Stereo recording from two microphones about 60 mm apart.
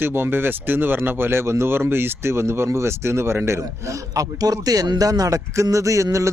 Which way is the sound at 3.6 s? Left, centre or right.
Right.